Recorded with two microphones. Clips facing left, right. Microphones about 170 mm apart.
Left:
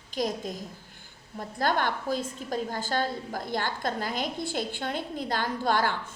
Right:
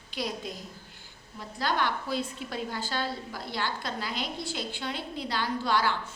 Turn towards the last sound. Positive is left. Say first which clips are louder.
# left 1 dB
turn(degrees=50)  # may be behind; listen again after turning